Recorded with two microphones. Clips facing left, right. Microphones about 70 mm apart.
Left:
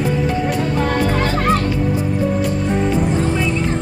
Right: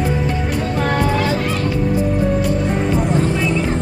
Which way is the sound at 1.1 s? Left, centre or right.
Left.